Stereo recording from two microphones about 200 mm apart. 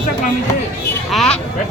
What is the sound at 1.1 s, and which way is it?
Speech, centre (ahead or behind).